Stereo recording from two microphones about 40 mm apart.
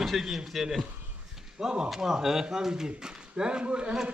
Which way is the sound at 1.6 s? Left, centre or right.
Centre.